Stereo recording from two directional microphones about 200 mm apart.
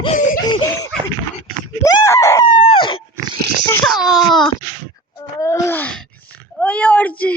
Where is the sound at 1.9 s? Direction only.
15° left (ahead or behind).